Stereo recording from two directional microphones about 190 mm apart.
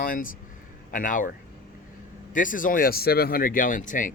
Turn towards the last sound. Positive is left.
turn(degrees=45)  # may be behind; listen again after turning